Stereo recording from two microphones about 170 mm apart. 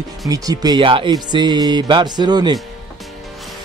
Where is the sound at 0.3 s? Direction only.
20° right (ahead or behind).